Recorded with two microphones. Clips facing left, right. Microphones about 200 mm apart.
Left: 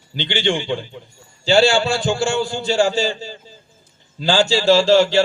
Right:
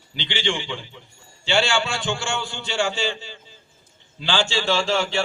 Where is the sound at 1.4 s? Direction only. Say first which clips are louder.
Left 7 dB; 35° left (ahead or behind).